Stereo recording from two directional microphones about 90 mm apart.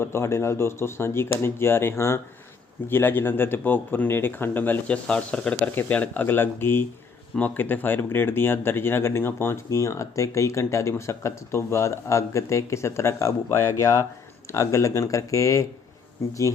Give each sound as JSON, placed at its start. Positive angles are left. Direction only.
{"t": 0.0, "sound": "speech", "side_deg": 30}
{"t": 5.0, "sound": "speech", "side_deg": 10}